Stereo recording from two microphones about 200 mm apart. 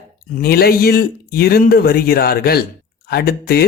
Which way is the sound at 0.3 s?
50° left (ahead or behind).